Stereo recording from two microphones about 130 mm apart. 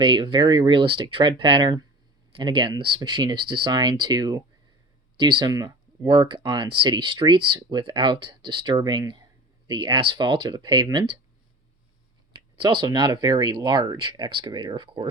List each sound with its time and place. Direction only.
0.0 s speech: 40° right (ahead or behind)
12.5 s speech: 35° right (ahead or behind)